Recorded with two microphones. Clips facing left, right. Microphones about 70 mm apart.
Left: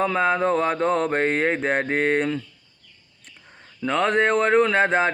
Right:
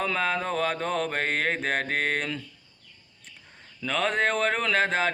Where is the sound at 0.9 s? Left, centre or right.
Left.